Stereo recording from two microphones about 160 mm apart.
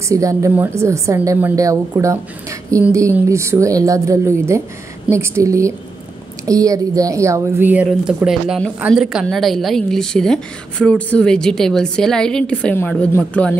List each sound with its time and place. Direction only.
0.1 s a woman's voice: 20° right (ahead or behind); by 13.6 s 10° left (ahead or behind)